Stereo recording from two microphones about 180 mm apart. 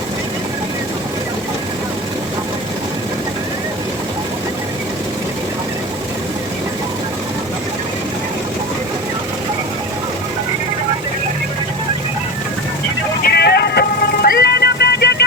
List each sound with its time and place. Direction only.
13.2 s music: 65° left (ahead or behind)